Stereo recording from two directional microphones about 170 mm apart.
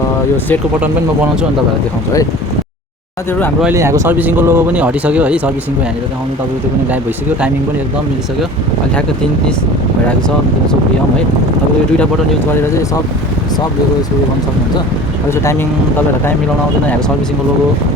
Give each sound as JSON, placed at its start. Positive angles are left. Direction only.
{"t": 3.6, "sound": "speech", "side_deg": -15}
{"t": 12.5, "sound": "speech", "side_deg": 15}